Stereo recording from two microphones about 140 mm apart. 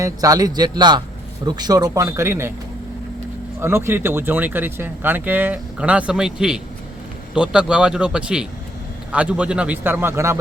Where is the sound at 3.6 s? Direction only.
20° right (ahead or behind).